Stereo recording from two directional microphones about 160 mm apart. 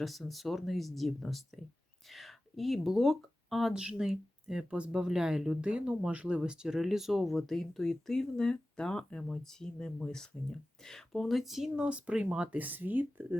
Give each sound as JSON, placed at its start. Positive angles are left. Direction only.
{"t": 0.0, "sound": "speech", "side_deg": 0}